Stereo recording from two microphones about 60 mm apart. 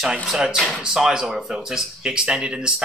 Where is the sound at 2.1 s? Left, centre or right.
Centre.